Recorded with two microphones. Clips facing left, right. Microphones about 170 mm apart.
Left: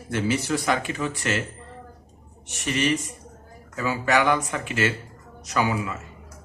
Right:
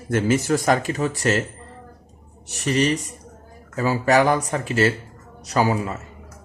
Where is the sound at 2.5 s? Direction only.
35° right (ahead or behind).